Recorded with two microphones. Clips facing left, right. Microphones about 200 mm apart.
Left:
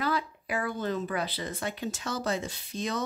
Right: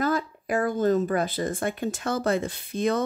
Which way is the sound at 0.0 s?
45° right (ahead or behind).